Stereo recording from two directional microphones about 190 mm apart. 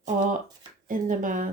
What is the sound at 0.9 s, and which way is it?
Speech, 45° right (ahead or behind).